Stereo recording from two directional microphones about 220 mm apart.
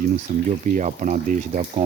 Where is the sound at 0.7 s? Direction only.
35° right (ahead or behind).